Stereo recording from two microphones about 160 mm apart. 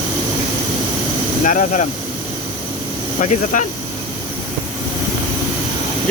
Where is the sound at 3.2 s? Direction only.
50° left (ahead or behind).